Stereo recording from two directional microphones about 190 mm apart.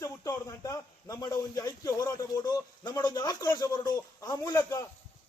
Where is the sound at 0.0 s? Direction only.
15° left (ahead or behind).